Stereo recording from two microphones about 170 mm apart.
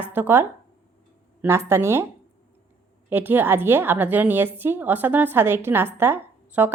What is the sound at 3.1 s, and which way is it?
A woman's voice, 10° right (ahead or behind).